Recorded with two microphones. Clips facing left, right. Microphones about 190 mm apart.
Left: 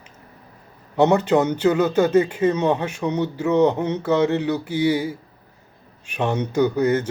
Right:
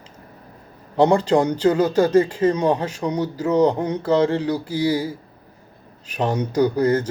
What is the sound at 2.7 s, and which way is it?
Speech, 25° left (ahead or behind).